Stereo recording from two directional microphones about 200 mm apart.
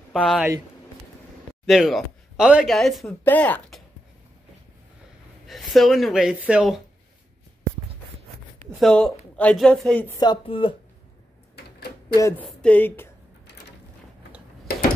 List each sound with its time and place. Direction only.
0.1 s speech: centre (ahead or behind)
1.7 s speech: centre (ahead or behind)
5.5 s speech: centre (ahead or behind)
8.7 s speech: 5° left (ahead or behind); by 10.8 s 25° left (ahead or behind)
11.5 s typewriter: 55° left (ahead or behind)
12.2 s speech: 15° left (ahead or behind)